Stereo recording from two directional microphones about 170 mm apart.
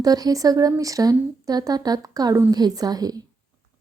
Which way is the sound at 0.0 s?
20° right (ahead or behind).